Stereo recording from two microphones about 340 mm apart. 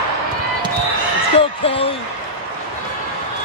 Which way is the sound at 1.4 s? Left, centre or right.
Centre.